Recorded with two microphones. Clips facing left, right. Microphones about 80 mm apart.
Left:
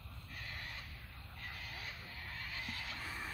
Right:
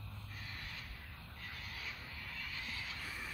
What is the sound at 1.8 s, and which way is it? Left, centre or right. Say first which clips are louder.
Vehicle: right 1 dB; left.